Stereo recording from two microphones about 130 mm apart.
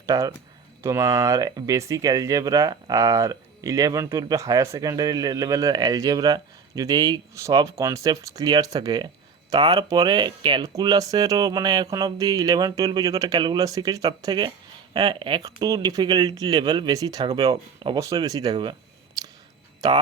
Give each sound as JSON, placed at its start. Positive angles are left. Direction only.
{"t": 0.0, "sound": "speech", "side_deg": -25}
{"t": 15.6, "sound": "speech", "side_deg": -30}
{"t": 19.8, "sound": "speech", "side_deg": -30}